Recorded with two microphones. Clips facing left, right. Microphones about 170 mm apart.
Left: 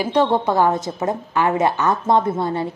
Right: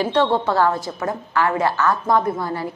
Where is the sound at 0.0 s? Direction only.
15° left (ahead or behind).